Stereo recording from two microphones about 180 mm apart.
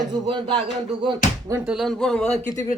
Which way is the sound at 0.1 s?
25° right (ahead or behind).